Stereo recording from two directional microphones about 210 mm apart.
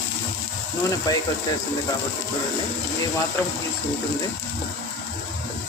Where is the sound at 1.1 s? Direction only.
20° left (ahead or behind).